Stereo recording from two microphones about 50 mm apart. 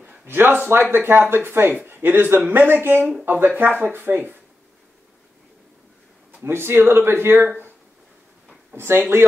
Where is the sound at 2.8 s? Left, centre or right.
Right.